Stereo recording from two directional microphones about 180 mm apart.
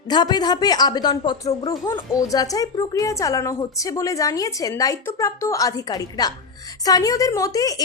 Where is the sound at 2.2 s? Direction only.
20° left (ahead or behind).